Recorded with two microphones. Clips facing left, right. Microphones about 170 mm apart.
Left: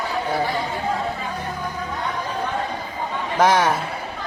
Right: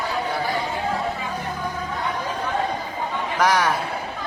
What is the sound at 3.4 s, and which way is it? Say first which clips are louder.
Speech: left 3 dB; 25° left (ahead or behind).